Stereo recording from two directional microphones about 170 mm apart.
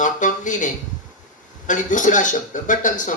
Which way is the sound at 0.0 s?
50° left (ahead or behind).